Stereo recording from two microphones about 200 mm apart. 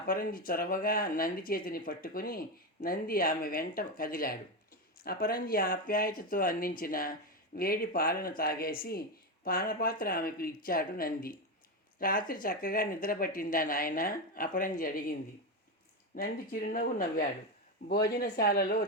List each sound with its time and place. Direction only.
0.1 s speech: 45° left (ahead or behind)
16.1 s speech: 45° left (ahead or behind)